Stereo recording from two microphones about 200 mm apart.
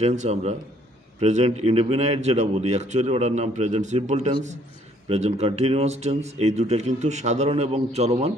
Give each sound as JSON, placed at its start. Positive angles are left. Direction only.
{"t": 0.0, "sound": "a man's voice", "side_deg": -35}